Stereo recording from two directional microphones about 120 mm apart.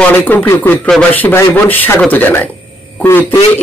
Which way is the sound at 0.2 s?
15° left (ahead or behind).